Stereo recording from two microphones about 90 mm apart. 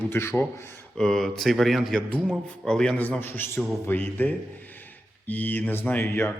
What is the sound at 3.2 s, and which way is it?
A man's voice, 25° left (ahead or behind).